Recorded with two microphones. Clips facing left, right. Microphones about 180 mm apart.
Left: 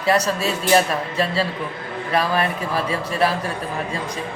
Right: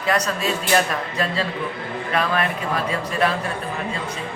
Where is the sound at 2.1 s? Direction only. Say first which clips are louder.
Left 2 dB; 35° left (ahead or behind).